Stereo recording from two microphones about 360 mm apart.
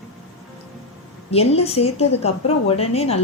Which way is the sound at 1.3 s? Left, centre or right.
Centre.